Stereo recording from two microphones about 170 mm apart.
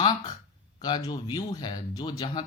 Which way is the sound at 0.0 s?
25° left (ahead or behind).